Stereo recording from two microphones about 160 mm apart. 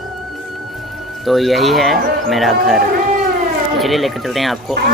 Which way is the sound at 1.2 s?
Centre (ahead or behind).